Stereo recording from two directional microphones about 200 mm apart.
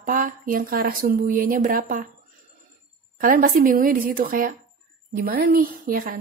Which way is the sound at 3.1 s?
45° right (ahead or behind).